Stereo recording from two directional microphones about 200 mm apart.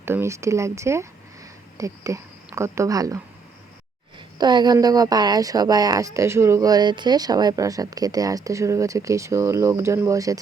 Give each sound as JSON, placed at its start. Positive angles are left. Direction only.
{"t": 0.0, "sound": "speech", "side_deg": -10}
{"t": 4.4, "sound": "speech", "side_deg": -20}